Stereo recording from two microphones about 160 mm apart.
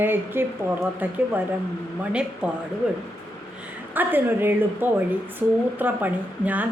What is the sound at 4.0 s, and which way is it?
A woman's voice, 10° right (ahead or behind).